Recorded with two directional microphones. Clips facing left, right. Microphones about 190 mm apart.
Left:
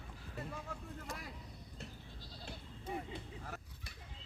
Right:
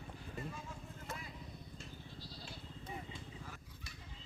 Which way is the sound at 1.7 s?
50° left (ahead or behind).